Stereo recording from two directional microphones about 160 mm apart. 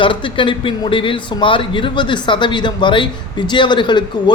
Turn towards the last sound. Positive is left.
turn(degrees=30)  # may be behind; listen again after turning